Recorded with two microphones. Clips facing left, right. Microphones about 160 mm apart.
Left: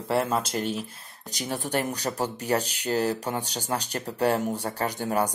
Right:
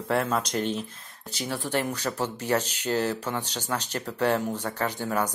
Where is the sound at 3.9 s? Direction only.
35° left (ahead or behind).